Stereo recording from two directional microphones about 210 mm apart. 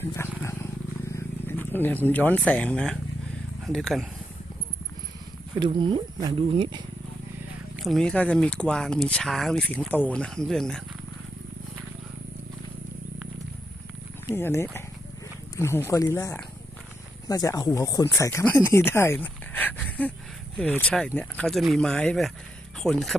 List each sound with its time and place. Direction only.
0.2 s speech: 10° left (ahead or behind)
5.5 s speech: 25° right (ahead or behind)
7.8 s speech: centre (ahead or behind)
14.3 s speech: 10° left (ahead or behind)